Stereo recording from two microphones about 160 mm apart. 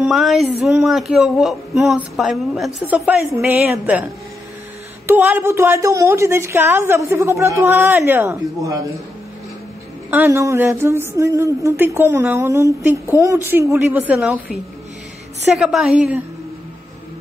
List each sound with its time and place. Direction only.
0.0 s speech: centre (ahead or behind)
5.0 s speech: 10° right (ahead or behind)
10.1 s speech: 15° right (ahead or behind)